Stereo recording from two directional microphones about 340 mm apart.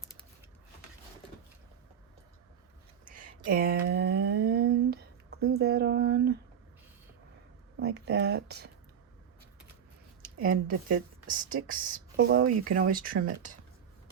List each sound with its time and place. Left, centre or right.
3.0 s a sound: right
7.8 s speech: right
10.2 s speech: right